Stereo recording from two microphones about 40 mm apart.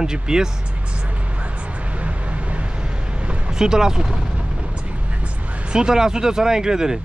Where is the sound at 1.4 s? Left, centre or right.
Right.